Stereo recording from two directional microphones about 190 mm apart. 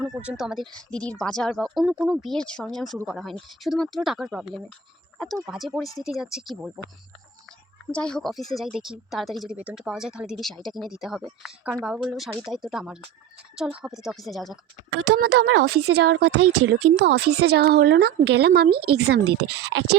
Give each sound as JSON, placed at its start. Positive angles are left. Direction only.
{"t": 0.0, "sound": "a woman's voice", "side_deg": -5}
{"t": 7.9, "sound": "a woman's voice", "side_deg": 5}
{"t": 14.8, "sound": "speech", "side_deg": -65}